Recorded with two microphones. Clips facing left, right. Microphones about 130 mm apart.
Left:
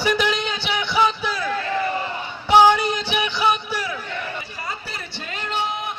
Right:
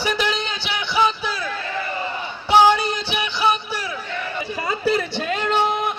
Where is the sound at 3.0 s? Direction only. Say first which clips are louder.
Right 1 dB; 15° left (ahead or behind).